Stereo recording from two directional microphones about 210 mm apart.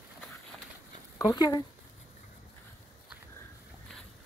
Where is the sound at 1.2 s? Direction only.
15° left (ahead or behind).